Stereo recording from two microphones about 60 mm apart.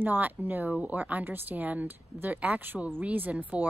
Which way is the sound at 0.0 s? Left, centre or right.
Right.